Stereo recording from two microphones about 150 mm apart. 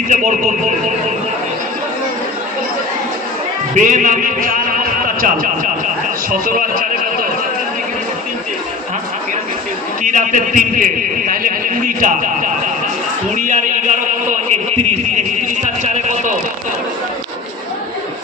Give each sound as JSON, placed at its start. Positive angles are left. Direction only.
{"t": 0.1, "sound": "a man's voice", "side_deg": -55}
{"t": 3.8, "sound": "a man's voice", "side_deg": -60}
{"t": 5.0, "sound": "a sound", "side_deg": -65}
{"t": 6.4, "sound": "speech", "side_deg": -65}
{"t": 10.0, "sound": "a man's voice", "side_deg": -60}